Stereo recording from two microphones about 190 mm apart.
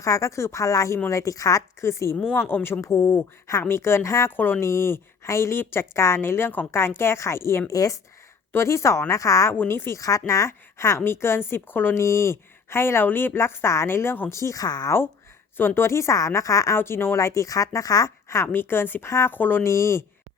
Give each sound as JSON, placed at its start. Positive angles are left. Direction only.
{"t": 0.0, "sound": "speech", "side_deg": 15}